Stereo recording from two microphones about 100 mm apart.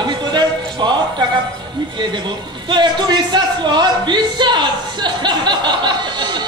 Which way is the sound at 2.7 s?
45° right (ahead or behind).